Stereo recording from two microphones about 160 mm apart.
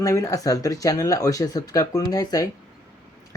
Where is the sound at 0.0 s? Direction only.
20° left (ahead or behind).